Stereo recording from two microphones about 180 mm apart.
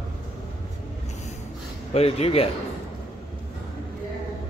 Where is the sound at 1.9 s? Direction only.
35° left (ahead or behind).